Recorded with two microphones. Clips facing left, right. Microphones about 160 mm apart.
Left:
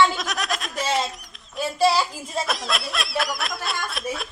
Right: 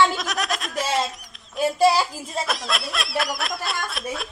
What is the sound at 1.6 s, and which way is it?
Speech, 45° right (ahead or behind).